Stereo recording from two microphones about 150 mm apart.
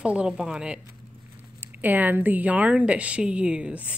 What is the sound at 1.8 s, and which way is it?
A woman's voice, 10° right (ahead or behind).